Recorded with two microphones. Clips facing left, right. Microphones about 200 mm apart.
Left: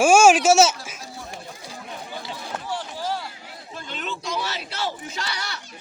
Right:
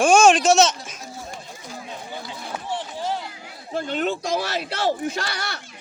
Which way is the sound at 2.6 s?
25° right (ahead or behind).